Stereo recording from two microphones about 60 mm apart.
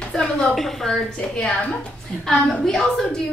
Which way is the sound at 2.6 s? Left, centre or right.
Centre.